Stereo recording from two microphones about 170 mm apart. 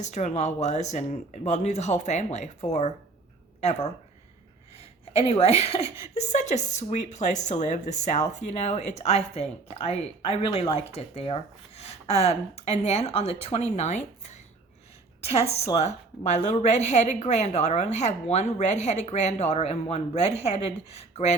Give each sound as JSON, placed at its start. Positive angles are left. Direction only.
{"t": 0.0, "sound": "a woman's voice", "side_deg": 45}